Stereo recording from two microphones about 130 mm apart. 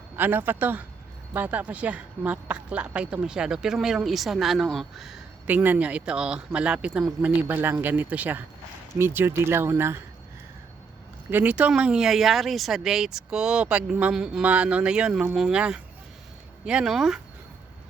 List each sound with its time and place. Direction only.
0.2 s speech: 15° right (ahead or behind)
5.5 s speech: 15° right (ahead or behind)
11.3 s speech: 15° right (ahead or behind)